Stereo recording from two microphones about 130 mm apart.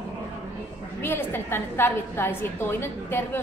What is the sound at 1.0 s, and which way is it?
A woman's voice, 15° left (ahead or behind).